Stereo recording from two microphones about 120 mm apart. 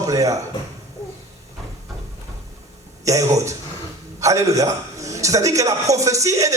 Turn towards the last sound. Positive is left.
turn(degrees=-25)  # may be behind; listen again after turning